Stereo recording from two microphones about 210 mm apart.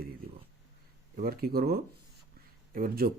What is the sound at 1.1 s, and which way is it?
Speech, 45° right (ahead or behind).